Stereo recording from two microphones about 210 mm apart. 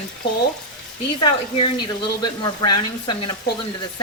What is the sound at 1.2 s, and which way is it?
Speech, 25° left (ahead or behind).